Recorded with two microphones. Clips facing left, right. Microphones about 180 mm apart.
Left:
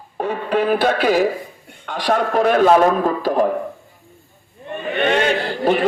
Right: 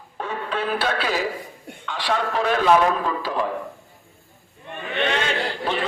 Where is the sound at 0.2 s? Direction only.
40° left (ahead or behind).